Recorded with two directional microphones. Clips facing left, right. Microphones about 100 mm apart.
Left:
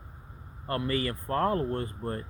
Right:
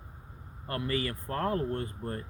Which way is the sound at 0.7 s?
40° left (ahead or behind).